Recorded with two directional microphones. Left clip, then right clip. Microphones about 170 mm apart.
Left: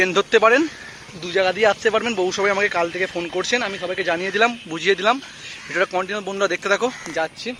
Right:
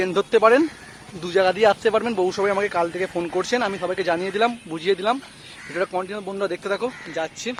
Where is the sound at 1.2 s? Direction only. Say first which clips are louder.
Even; 35° right (ahead or behind).